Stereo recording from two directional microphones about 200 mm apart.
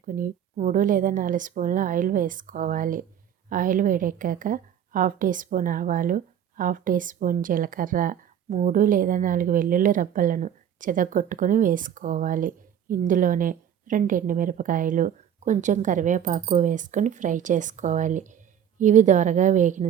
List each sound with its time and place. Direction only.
0.0 s a woman's voice: 45° right (ahead or behind)